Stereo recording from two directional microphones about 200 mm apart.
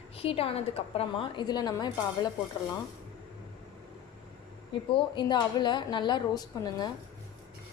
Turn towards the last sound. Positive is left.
turn(degrees=20)  # may be behind; listen again after turning